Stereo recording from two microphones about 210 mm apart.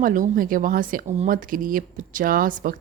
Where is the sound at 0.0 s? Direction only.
40° right (ahead or behind).